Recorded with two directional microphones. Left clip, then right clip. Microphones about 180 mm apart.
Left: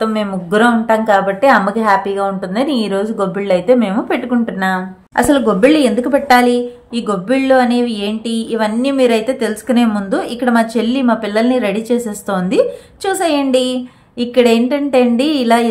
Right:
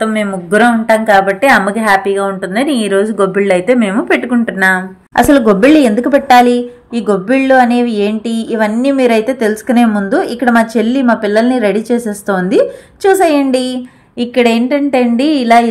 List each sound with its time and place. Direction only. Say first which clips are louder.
0.0 s a woman's voice: right 3 dB; 5° right (ahead or behind)